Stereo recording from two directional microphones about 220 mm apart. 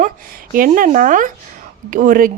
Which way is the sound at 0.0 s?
40° right (ahead or behind).